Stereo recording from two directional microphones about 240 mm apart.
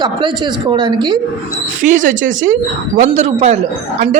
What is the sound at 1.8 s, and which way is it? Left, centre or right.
A woman's voice, right.